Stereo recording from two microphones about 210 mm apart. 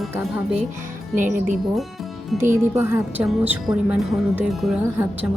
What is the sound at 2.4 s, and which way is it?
A woman's voice, 10° right (ahead or behind).